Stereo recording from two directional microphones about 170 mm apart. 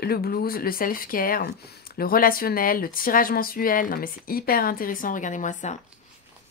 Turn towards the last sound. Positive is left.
turn(degrees=45)  # may be behind; listen again after turning